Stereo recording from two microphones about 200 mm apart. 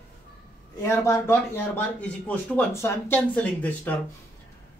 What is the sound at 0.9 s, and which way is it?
Speech, 10° left (ahead or behind).